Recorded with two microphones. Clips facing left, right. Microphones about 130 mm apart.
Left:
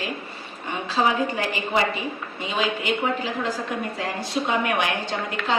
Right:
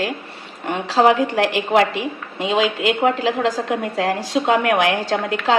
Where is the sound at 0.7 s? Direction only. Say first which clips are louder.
Right 7 dB; 80° right.